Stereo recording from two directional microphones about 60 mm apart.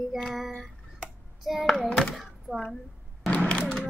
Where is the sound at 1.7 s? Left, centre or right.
Centre.